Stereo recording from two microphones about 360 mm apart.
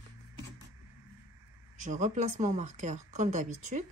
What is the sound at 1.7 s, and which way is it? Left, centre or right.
Speech, right.